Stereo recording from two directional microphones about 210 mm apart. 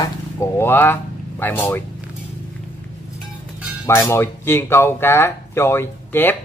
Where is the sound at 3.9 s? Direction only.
10° left (ahead or behind).